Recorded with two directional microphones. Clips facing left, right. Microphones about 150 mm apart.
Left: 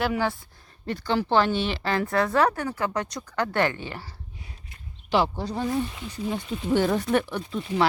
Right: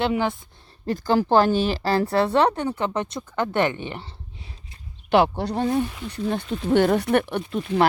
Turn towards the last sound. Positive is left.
turn(degrees=-60)  # may be behind; listen again after turning